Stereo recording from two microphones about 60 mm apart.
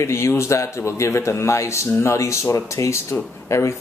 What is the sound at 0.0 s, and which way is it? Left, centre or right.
A man's voice, left.